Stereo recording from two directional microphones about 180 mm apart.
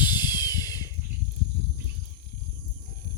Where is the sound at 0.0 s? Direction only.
25° left (ahead or behind).